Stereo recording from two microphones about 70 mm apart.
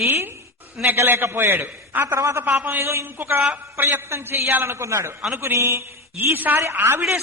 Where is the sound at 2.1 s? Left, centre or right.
Right.